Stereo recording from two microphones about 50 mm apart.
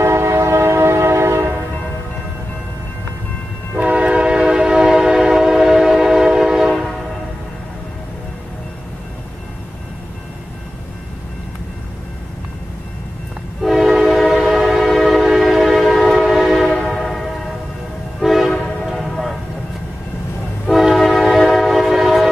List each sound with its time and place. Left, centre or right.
0.0 s train: right
3.7 s train: right; by 6.7 s centre
13.6 s train: centre
18.2 s train horn: centre
18.9 s a sound: centre
20.6 s train: centre